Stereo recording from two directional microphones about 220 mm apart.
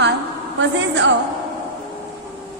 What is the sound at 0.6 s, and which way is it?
Speech, 55° right (ahead or behind).